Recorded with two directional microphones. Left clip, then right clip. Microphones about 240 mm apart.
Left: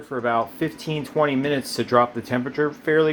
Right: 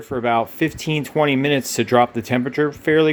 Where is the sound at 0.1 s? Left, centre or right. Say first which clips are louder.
Right 3 dB; right.